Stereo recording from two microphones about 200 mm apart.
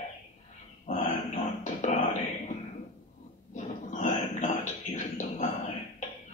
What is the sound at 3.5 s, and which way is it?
Beatboxing, 40° left (ahead or behind).